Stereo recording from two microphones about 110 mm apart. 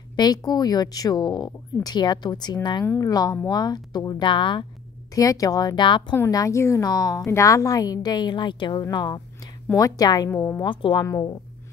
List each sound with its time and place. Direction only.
0.1 s speech: 40° left (ahead or behind)
2.8 s speech: 20° left (ahead or behind)
3.1 s speech: 35° left (ahead or behind)
5.1 s speech: 30° left (ahead or behind)
6.3 s speech: 30° left (ahead or behind)
10.3 s speech: 25° left (ahead or behind)
10.6 s speech: 50° left (ahead or behind)
11.1 s speech: 30° left (ahead or behind)